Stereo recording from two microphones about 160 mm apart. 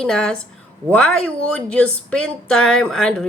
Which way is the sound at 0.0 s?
5° left (ahead or behind).